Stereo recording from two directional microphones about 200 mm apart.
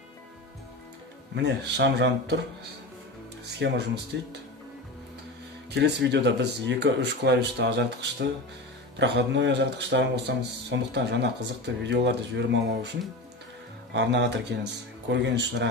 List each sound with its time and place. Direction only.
1.3 s speech: 60° right (ahead or behind)
3.4 s speech: 55° right (ahead or behind)
5.7 s speech: 60° right (ahead or behind)
13.9 s speech: 60° right (ahead or behind)